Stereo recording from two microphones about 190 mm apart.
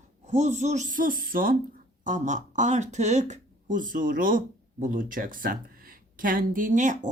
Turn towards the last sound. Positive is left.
turn(degrees=-40)  # may be behind; listen again after turning